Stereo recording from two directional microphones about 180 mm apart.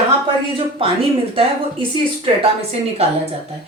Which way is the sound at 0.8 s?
30° right (ahead or behind).